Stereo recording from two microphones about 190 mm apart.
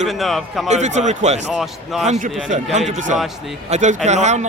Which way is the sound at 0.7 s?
35° right (ahead or behind).